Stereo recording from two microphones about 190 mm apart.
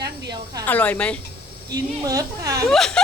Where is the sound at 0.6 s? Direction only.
10° left (ahead or behind).